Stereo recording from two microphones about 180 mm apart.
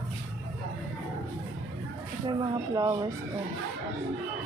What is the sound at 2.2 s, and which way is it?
Speech, 25° right (ahead or behind).